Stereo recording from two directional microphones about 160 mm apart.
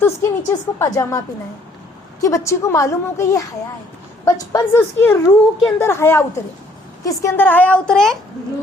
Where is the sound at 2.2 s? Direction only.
20° left (ahead or behind); by 8.2 s 5° left (ahead or behind).